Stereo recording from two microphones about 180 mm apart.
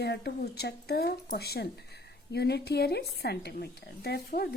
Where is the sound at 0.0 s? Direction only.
65° left (ahead or behind).